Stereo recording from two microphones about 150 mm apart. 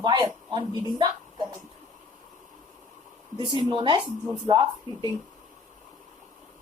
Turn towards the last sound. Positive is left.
turn(degrees=-30)  # may be behind; listen again after turning